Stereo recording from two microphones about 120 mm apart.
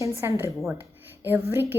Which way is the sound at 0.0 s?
25° right (ahead or behind).